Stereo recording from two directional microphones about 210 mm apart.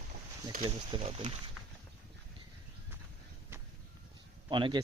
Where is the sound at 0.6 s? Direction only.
25° right (ahead or behind).